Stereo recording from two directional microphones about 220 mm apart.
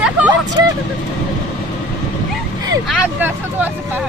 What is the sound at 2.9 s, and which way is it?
Speech, 5° right (ahead or behind).